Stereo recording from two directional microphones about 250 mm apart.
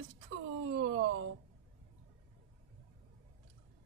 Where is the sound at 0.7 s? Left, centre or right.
Right.